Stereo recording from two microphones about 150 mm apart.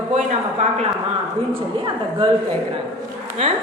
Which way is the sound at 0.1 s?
50° right (ahead or behind).